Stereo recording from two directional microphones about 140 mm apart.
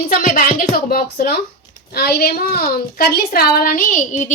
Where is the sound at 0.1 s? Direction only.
80° left.